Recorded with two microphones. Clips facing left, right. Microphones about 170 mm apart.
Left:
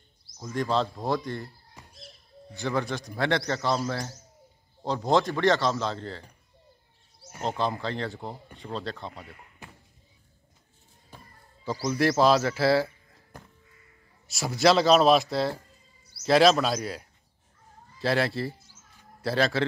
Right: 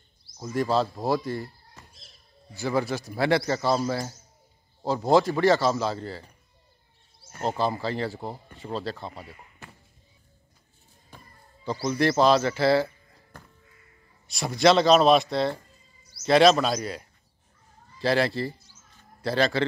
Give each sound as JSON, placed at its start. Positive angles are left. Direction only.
{"t": 0.4, "sound": "a man's voice", "side_deg": -5}
{"t": 1.8, "sound": "a sound", "side_deg": 15}
{"t": 2.5, "sound": "a man's voice", "side_deg": -5}
{"t": 7.4, "sound": "speech", "side_deg": -5}
{"t": 9.6, "sound": "a sound", "side_deg": 15}
{"t": 11.6, "sound": "speech", "side_deg": 0}
{"t": 14.2, "sound": "speech", "side_deg": 5}